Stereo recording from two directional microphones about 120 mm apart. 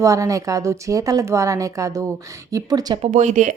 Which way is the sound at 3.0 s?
80° right.